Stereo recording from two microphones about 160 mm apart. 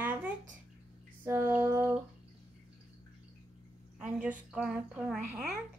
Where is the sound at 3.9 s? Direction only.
10° right (ahead or behind).